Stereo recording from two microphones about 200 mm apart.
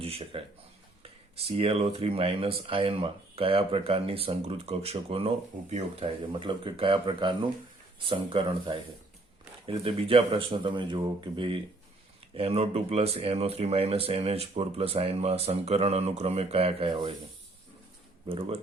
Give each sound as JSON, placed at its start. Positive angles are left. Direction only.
{"t": 0.0, "sound": "speech", "side_deg": -30}
{"t": 18.3, "sound": "speech", "side_deg": -30}